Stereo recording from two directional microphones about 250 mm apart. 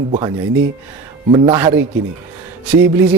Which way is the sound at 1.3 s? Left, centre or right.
Centre.